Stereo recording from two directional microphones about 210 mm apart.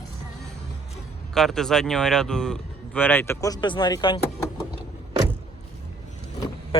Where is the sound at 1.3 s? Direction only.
Centre (ahead or behind); by 4.2 s 20° left (ahead or behind).